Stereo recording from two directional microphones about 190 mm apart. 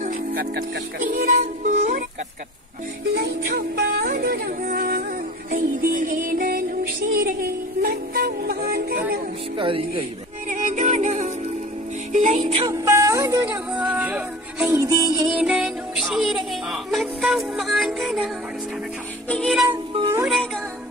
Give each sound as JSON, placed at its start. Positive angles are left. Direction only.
{"t": 0.0, "sound": "music", "side_deg": -50}
{"t": 3.2, "sound": "music", "side_deg": -55}
{"t": 9.6, "sound": "speech", "side_deg": -25}
{"t": 10.5, "sound": "music", "side_deg": -40}
{"t": 12.7, "sound": "music", "side_deg": -15}
{"t": 15.3, "sound": "music", "side_deg": -5}
{"t": 19.7, "sound": "music", "side_deg": -15}